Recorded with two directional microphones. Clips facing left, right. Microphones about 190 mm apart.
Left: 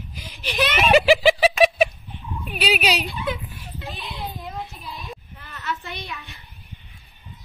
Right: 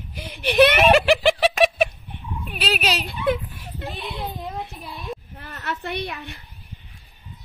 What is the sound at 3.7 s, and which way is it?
Speech, 55° right (ahead or behind).